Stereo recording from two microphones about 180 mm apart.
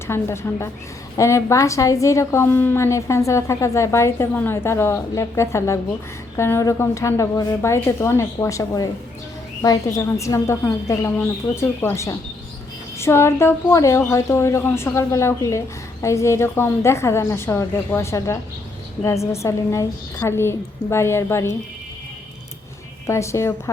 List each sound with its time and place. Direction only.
0.1 s a woman's voice: 15° left (ahead or behind)
23.0 s a woman's voice: 15° left (ahead or behind)